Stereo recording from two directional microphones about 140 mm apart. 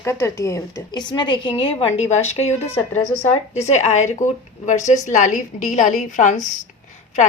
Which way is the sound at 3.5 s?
55° left (ahead or behind).